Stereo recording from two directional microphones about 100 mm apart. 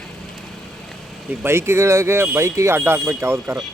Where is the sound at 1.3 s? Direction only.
20° right (ahead or behind).